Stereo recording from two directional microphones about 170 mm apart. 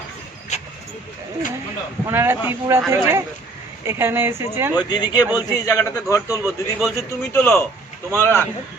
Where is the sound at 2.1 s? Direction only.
15° right (ahead or behind).